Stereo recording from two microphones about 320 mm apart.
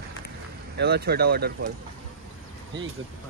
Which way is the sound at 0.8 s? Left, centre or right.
Right.